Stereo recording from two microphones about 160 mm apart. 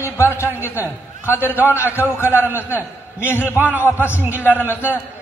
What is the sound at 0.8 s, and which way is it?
Speech, 15° left (ahead or behind).